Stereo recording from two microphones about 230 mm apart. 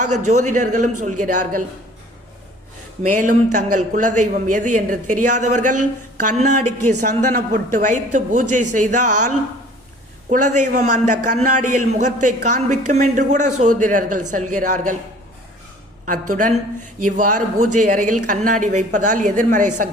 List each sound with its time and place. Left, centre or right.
0.3 s a man's voice: right
3.0 s a man's voice: right
16.3 s a man's voice: right